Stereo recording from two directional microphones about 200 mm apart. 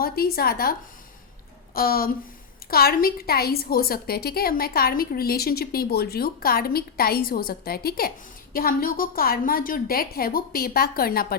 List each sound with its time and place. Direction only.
0.0 s a woman's voice: 50° left (ahead or behind)